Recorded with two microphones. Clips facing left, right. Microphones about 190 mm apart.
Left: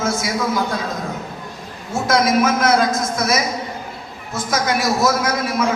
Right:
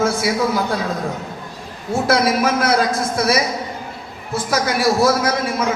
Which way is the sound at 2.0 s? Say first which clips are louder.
Left 1 dB; 30° right (ahead or behind).